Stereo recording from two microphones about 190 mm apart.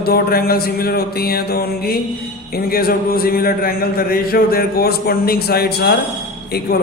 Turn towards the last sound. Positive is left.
turn(degrees=55)  # may be behind; listen again after turning